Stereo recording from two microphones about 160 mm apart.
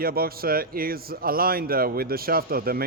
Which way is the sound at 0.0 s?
70° right (ahead or behind).